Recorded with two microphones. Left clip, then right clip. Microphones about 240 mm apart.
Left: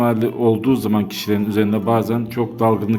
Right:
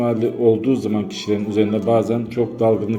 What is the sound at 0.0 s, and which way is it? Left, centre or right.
A man's voice, left.